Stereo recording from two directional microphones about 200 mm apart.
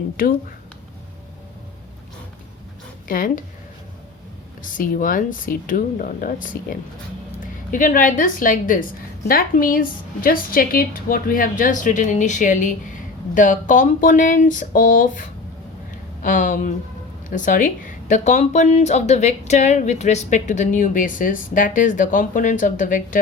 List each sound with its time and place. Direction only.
0.2 s a woman's voice: 45° left (ahead or behind)
3.1 s a woman's voice: 45° left (ahead or behind)
4.8 s a woman's voice: 45° left (ahead or behind)
7.7 s a woman's voice: 40° left (ahead or behind)